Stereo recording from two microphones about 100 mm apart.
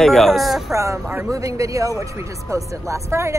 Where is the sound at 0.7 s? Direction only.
30° right (ahead or behind).